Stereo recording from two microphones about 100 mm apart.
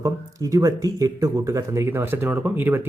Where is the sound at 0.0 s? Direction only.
35° right (ahead or behind).